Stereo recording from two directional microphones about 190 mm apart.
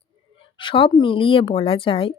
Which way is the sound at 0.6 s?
25° left (ahead or behind).